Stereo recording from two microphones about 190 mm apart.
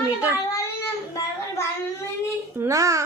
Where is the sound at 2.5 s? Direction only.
15° right (ahead or behind).